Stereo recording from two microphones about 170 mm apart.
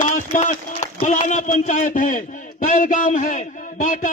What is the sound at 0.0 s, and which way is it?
A man's voice, 45° left (ahead or behind).